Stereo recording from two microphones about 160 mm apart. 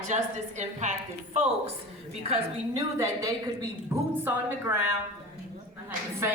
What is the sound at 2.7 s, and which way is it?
A woman's voice, 20° right (ahead or behind).